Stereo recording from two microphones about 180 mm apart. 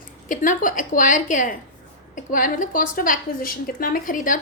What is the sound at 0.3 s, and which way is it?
A woman's voice, 45° left (ahead or behind).